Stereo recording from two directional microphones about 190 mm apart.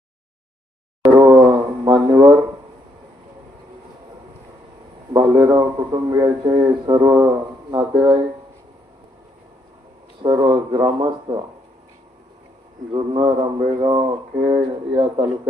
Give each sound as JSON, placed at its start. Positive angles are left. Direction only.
{"t": 1.1, "sound": "a sound", "side_deg": -20}
{"t": 5.1, "sound": "a man's voice", "side_deg": -20}
{"t": 10.2, "sound": "a man's voice", "side_deg": -25}
{"t": 12.9, "sound": "a man's voice", "side_deg": -25}